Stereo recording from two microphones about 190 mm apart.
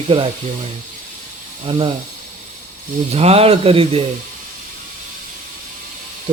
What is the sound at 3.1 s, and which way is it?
Speech, 30° right (ahead or behind).